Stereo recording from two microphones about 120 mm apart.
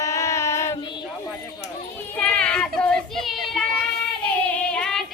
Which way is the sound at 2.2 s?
10° left (ahead or behind).